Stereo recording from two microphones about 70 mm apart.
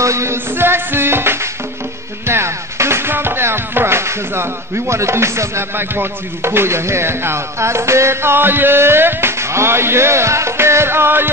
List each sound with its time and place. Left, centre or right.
0.0 s music: right